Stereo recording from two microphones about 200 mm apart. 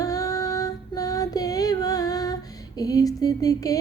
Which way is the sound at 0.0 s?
15° left (ahead or behind).